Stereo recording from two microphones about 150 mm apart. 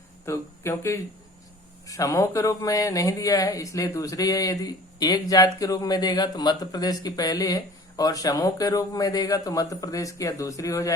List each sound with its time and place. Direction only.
0.3 s speech: 20° left (ahead or behind)